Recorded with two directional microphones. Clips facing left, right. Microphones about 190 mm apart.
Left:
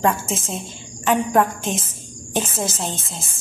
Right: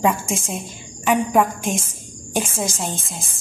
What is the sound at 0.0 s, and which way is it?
A woman's voice, 10° right (ahead or behind).